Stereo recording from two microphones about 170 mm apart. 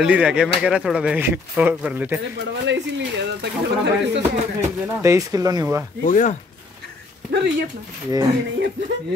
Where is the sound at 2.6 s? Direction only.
90° right.